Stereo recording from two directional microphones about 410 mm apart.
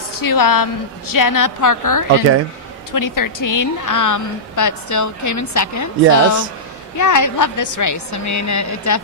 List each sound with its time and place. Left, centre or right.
0.1 s a woman's voice: left